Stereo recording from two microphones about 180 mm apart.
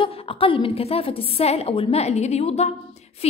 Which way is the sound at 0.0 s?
30° left (ahead or behind).